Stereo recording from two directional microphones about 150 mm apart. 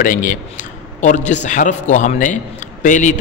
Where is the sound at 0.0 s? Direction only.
60° left (ahead or behind).